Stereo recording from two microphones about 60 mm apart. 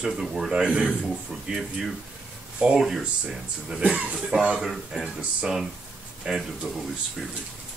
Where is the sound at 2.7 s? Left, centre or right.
Centre.